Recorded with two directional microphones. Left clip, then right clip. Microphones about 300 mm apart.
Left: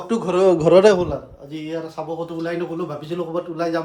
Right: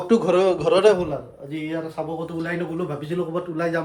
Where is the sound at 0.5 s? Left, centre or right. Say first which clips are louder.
Left 4 dB; left.